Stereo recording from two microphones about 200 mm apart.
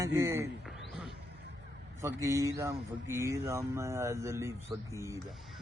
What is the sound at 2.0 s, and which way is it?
Speech, 15° right (ahead or behind).